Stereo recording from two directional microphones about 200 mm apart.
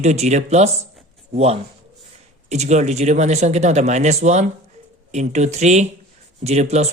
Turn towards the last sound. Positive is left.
turn(degrees=-35)  # may be behind; listen again after turning